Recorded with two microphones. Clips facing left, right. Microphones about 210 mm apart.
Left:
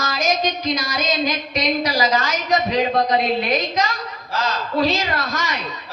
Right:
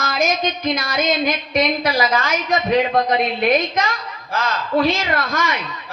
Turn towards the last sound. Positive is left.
turn(degrees=-55)  # may be behind; listen again after turning